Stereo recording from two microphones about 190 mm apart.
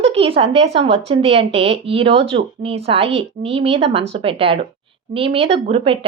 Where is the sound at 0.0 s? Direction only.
30° right (ahead or behind).